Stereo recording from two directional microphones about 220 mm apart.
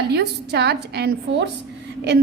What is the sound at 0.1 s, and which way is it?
A woman's voice, 50° right (ahead or behind).